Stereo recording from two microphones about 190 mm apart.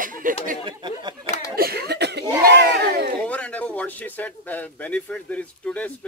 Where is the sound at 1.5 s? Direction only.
55° right (ahead or behind).